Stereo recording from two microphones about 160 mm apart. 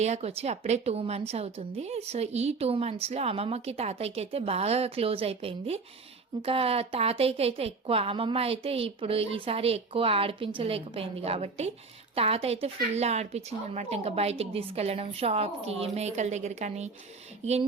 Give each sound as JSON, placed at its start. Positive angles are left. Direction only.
{"t": 0.0, "sound": "a woman's voice", "side_deg": -40}